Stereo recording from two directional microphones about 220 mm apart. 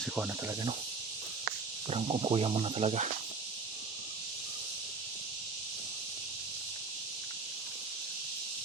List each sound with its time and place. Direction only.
1.9 s speech: 25° right (ahead or behind)